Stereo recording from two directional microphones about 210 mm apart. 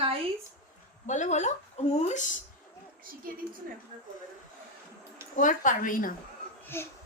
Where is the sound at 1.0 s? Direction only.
35° left (ahead or behind).